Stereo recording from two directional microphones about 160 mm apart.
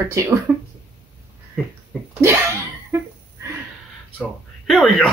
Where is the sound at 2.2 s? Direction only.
15° right (ahead or behind).